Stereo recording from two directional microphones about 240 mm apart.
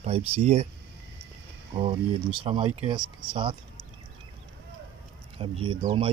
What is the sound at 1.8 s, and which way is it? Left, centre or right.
Speech, right.